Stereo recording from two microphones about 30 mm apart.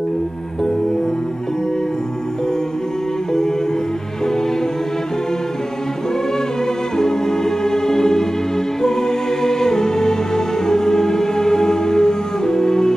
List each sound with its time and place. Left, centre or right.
7.0 s music: centre